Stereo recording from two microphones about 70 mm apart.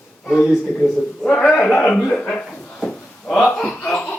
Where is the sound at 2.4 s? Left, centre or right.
Centre.